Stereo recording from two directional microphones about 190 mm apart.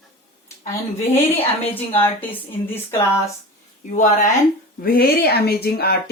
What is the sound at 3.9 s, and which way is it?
Speech, 40° left (ahead or behind).